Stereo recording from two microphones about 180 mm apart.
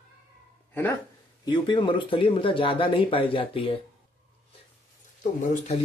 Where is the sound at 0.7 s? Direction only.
10° left (ahead or behind).